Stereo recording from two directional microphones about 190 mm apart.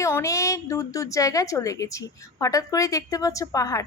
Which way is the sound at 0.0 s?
15° left (ahead or behind).